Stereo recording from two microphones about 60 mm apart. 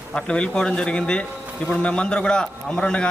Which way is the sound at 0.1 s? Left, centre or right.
Centre.